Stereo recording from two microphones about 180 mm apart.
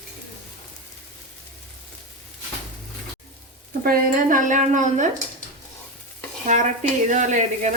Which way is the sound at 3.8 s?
50° right (ahead or behind).